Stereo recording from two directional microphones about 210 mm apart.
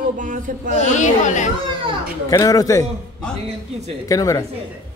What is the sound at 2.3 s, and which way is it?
Speech, 15° left (ahead or behind).